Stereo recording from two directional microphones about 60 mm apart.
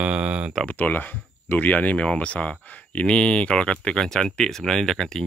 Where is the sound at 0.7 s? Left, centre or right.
Left.